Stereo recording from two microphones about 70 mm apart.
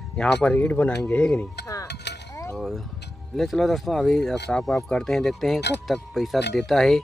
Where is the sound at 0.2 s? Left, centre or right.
Centre.